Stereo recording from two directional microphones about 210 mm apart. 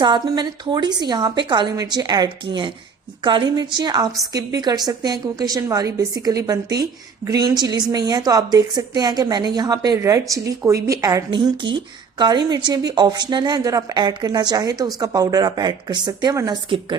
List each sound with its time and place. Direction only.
0.0 s a woman's voice: 20° right (ahead or behind)